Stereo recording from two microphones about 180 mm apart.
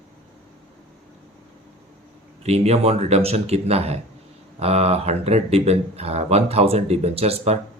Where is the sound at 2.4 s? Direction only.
35° right (ahead or behind).